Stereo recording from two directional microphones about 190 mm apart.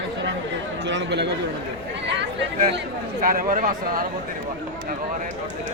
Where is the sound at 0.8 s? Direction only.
65° right (ahead or behind).